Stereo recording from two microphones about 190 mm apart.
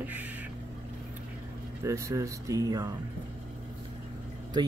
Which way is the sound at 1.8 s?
15° right (ahead or behind).